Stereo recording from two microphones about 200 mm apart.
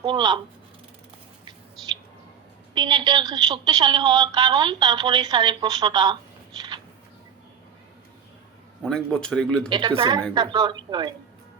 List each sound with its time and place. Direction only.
0.0 s a woman's voice: 20° right (ahead or behind)
2.7 s a woman's voice: 20° right (ahead or behind)
8.8 s speech: 5° left (ahead or behind)
9.6 s a woman's voice: 25° right (ahead or behind)